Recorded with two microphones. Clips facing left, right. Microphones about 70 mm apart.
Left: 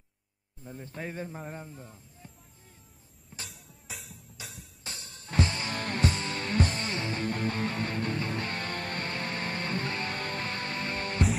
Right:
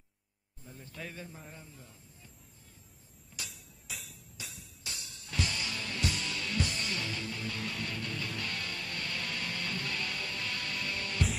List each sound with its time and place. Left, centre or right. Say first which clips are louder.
0.7 s speech: left 6 dB; left
3.9 s music: left 1 dB; centre
4.4 s music: left 2 dB; left
4.8 s music: left 2 dB; left